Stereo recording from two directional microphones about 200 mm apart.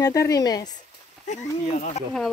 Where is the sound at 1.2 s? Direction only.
35° left (ahead or behind).